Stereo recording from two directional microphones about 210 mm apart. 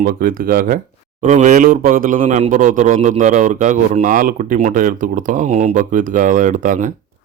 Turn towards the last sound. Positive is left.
turn(degrees=-35)  # may be behind; listen again after turning